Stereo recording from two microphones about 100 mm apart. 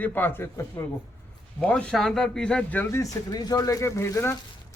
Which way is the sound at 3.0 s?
40° left (ahead or behind).